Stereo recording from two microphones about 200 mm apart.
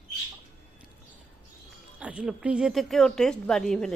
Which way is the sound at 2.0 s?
5° right (ahead or behind).